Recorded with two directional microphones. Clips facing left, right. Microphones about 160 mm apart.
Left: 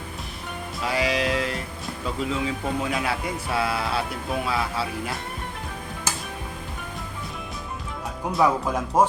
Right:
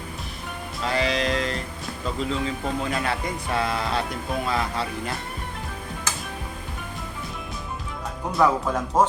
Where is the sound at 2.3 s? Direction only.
5° left (ahead or behind).